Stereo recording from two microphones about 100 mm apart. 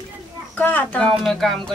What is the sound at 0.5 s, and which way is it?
Speech, 15° left (ahead or behind).